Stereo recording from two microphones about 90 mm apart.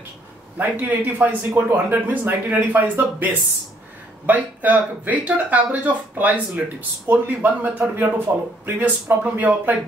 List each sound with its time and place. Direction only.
0.6 s speech: 20° right (ahead or behind)